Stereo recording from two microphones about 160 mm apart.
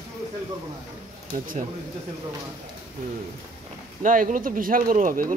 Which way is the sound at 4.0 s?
55° right (ahead or behind).